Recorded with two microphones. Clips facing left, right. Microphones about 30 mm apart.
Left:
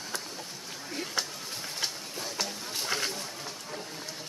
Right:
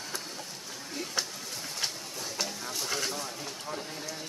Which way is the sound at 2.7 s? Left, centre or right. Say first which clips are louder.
Left 3 dB; left.